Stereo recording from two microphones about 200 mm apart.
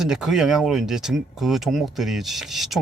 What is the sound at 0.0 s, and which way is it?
Speech, 5° right (ahead or behind).